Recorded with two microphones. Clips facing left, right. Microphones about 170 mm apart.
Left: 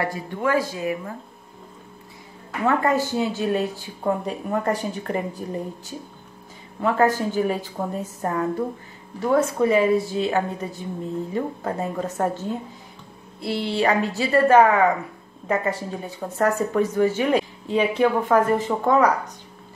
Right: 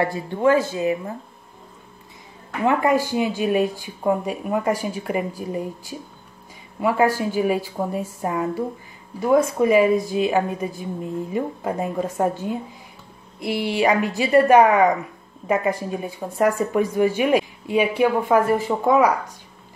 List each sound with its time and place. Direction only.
0.0 s a woman's voice: 25° right (ahead or behind)
2.6 s speech: 15° right (ahead or behind)